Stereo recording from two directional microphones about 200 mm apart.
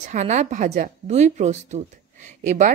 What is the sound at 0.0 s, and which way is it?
A woman's voice, 35° right (ahead or behind).